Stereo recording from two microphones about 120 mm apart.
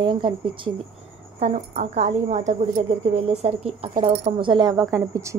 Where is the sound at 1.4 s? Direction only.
65° right (ahead or behind); by 2.9 s 80° right.